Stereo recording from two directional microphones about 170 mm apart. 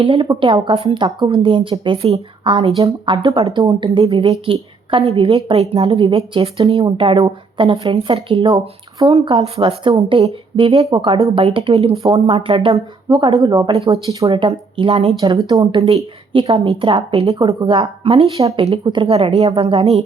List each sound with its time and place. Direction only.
0.0 s speech: 30° right (ahead or behind)
13.9 s speech: 20° right (ahead or behind)
14.3 s speech: 30° right (ahead or behind)
17.4 s speech: 25° right (ahead or behind)